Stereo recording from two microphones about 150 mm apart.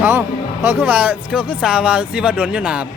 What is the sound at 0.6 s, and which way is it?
Speech, 10° right (ahead or behind).